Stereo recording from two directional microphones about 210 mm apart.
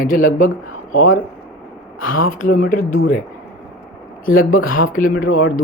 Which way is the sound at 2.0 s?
75° left (ahead or behind).